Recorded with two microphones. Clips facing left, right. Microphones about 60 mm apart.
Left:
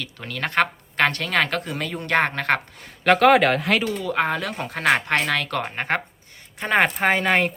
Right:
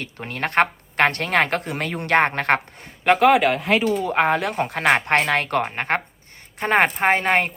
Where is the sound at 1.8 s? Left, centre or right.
Right.